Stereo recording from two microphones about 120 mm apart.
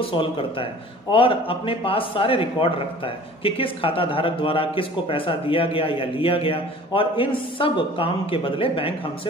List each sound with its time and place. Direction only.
0.1 s a man's voice: 45° left (ahead or behind)